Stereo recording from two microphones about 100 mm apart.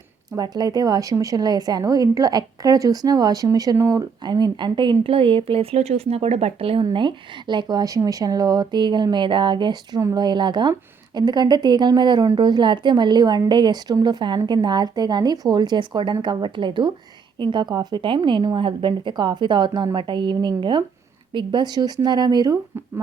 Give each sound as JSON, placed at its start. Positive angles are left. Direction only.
{"t": 0.3, "sound": "a woman's voice", "side_deg": -40}
{"t": 6.8, "sound": "a woman's voice", "side_deg": -50}